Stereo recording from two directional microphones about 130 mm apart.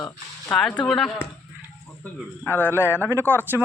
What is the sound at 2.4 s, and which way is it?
Speech, 15° left (ahead or behind).